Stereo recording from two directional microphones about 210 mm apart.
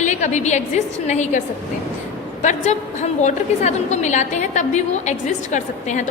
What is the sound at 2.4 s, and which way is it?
A woman's voice, 35° left (ahead or behind).